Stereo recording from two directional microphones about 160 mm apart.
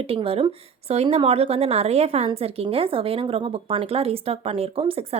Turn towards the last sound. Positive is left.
turn(degrees=-35)  # may be behind; listen again after turning